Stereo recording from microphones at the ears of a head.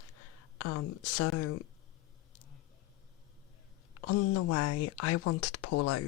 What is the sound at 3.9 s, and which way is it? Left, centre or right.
Speech, left.